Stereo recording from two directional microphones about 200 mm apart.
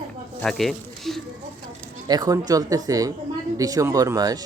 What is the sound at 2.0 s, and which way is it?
Speech, 20° right (ahead or behind).